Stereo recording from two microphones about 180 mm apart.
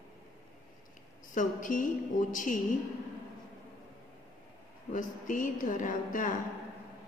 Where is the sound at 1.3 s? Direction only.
45° left (ahead or behind).